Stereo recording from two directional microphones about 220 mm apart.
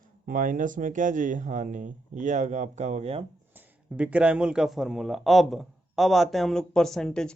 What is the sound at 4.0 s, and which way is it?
A man's voice, 5° right (ahead or behind).